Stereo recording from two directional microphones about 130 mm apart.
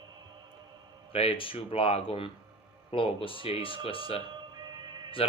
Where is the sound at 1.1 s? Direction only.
45° left (ahead or behind).